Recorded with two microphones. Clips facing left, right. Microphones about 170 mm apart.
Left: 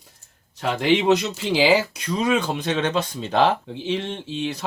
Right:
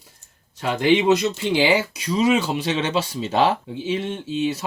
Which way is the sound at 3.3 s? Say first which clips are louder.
Even; 5° right (ahead or behind).